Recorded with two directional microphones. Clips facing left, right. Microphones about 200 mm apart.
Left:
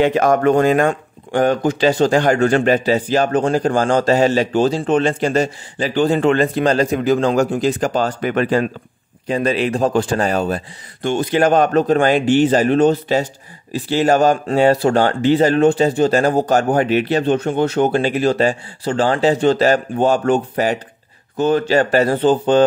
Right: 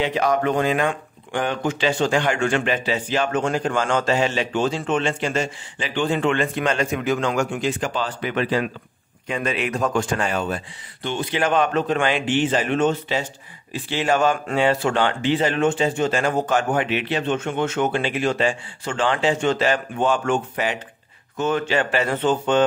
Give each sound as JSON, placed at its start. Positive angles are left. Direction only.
{"t": 0.0, "sound": "speech", "side_deg": 50}
{"t": 9.3, "sound": "speech", "side_deg": 35}